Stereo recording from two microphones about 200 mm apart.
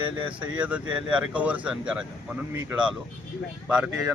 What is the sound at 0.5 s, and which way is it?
A man's voice, 5° right (ahead or behind).